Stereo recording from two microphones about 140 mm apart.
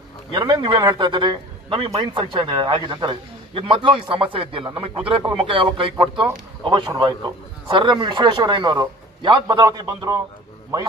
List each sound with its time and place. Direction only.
0.3 s a man's voice: 35° right (ahead or behind)